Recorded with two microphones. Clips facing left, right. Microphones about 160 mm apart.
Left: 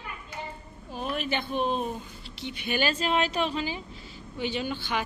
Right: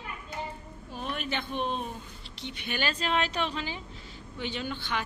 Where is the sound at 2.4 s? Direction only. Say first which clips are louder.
Left 5 dB; 10° left (ahead or behind).